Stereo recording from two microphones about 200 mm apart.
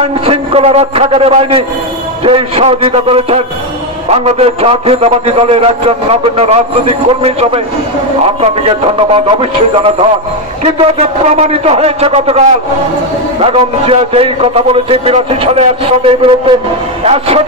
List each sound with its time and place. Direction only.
0.0 s a man's voice: 30° right (ahead or behind)